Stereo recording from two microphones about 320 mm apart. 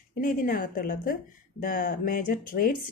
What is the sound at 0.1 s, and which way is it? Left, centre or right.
Speech, left.